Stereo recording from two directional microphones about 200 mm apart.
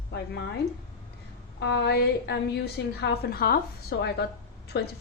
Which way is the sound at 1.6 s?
60° left (ahead or behind).